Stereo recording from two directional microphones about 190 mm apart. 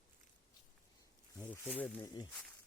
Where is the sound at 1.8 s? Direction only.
15° left (ahead or behind).